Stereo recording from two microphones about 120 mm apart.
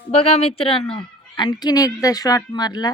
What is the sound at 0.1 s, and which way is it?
A woman's voice, 55° left (ahead or behind).